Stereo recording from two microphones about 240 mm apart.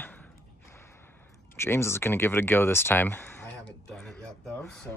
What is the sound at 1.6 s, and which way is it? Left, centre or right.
Speech, centre.